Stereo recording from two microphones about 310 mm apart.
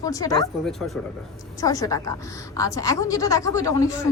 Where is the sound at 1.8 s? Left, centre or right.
Centre.